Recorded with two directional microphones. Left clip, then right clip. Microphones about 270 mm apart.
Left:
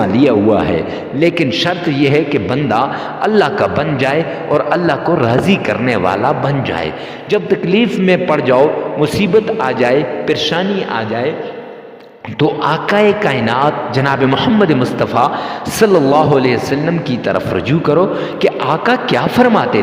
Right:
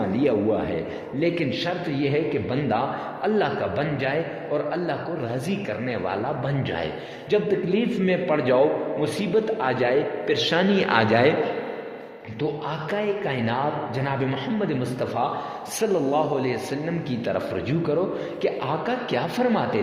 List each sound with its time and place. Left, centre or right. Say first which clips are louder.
0.1 s a man's voice: left 10 dB; left
10.9 s a man's voice: right 2 dB; centre
12.4 s a man's voice: left 14 dB; left